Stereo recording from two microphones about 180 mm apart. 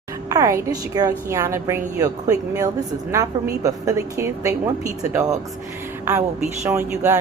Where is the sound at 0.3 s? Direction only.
20° right (ahead or behind).